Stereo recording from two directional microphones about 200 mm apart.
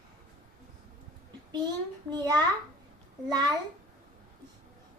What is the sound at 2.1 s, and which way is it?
A child's voice, 20° right (ahead or behind).